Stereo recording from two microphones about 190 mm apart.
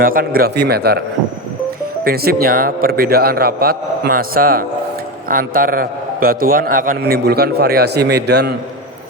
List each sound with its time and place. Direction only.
0.0 s a man's voice: 50° right (ahead or behind)
2.0 s a man's voice: 55° right (ahead or behind)